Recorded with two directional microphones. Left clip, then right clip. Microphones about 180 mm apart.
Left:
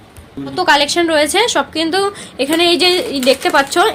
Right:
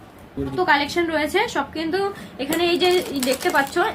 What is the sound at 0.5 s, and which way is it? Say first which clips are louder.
A woman's voice: left 7 dB; 55° left (ahead or behind).